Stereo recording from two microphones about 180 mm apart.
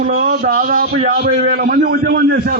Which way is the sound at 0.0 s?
45° right (ahead or behind).